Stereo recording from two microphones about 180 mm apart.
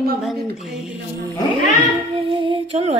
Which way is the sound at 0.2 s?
Centre (ahead or behind).